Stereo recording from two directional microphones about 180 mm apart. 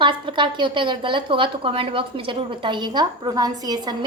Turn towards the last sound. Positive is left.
turn(degrees=-20)  # may be behind; listen again after turning